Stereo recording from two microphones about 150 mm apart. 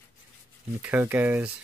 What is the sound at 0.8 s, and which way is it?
Speech, 10° right (ahead or behind).